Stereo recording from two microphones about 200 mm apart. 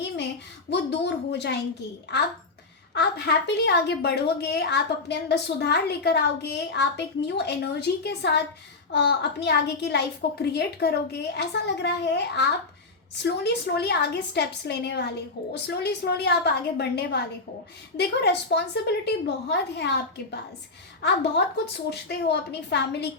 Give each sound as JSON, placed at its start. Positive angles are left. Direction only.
{"t": 0.7, "sound": "a woman's voice", "side_deg": 60}
{"t": 2.9, "sound": "a woman's voice", "side_deg": 60}
{"t": 21.0, "sound": "a woman's voice", "side_deg": 60}